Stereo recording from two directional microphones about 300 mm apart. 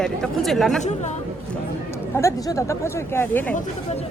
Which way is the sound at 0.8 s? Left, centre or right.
Left.